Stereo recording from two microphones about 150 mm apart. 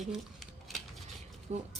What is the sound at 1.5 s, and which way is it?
Speech, 50° right (ahead or behind).